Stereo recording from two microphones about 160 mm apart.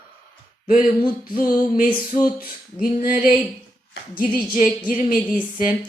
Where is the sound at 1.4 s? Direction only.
60° left (ahead or behind).